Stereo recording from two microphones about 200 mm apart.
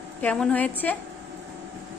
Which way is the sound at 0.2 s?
5° left (ahead or behind).